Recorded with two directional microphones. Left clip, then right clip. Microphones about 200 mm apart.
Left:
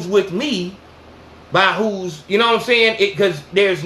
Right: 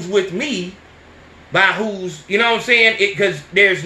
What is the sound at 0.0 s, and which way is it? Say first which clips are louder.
Speech: left 1 dB; 25° left (ahead or behind).